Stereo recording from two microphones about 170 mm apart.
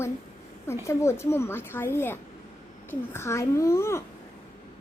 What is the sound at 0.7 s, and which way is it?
A woman's voice, 15° left (ahead or behind).